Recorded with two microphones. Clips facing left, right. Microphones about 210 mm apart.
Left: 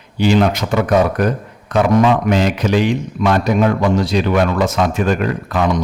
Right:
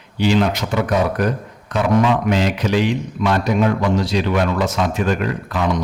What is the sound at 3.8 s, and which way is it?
Speech, 50° left (ahead or behind).